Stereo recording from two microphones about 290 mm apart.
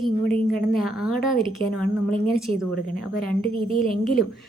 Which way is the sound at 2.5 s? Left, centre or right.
Left.